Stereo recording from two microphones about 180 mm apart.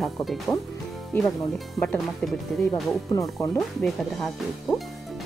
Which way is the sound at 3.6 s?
Centre (ahead or behind).